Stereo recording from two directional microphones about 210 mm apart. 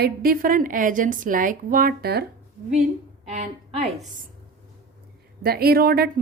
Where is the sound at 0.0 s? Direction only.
45° right (ahead or behind).